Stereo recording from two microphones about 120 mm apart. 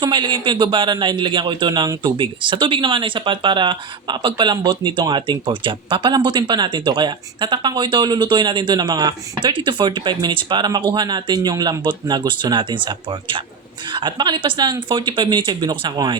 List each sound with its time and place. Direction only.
0.0 s a man's voice: 40° right (ahead or behind)